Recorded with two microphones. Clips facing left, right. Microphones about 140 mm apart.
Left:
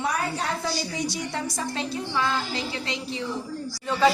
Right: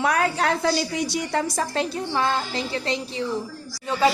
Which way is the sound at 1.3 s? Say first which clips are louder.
Right 6 dB; 50° right (ahead or behind).